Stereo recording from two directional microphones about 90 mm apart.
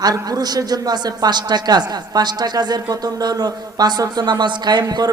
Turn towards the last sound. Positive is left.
turn(degrees=-45)  # may be behind; listen again after turning